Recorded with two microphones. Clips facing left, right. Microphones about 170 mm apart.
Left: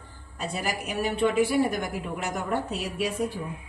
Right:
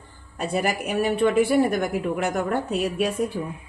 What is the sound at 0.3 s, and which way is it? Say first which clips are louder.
A woman's voice: right 6 dB; 60° right (ahead or behind).